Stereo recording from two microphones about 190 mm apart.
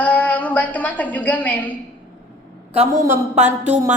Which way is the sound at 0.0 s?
10° left (ahead or behind).